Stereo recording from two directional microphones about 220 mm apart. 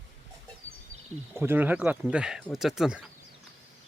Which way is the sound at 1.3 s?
10° right (ahead or behind).